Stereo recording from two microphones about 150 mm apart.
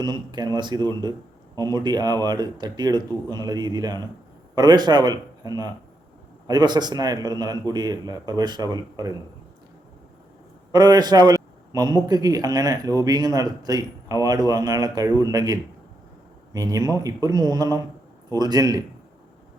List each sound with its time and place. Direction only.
0.0 s speech: 30° right (ahead or behind)
10.7 s speech: 25° right (ahead or behind)